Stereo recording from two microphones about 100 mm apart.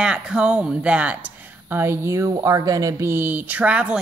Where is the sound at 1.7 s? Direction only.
25° right (ahead or behind).